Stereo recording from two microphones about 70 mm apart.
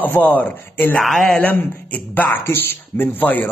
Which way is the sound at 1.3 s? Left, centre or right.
Left.